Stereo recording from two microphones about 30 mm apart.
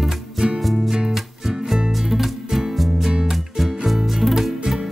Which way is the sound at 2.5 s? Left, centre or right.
Centre.